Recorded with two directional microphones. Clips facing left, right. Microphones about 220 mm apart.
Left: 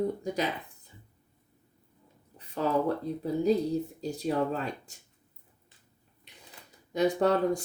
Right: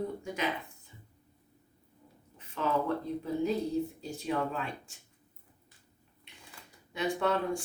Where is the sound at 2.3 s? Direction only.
35° left (ahead or behind).